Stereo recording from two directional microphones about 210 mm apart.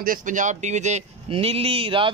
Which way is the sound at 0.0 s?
40° right (ahead or behind).